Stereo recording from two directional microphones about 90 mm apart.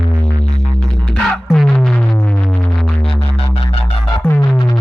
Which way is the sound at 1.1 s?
5° left (ahead or behind).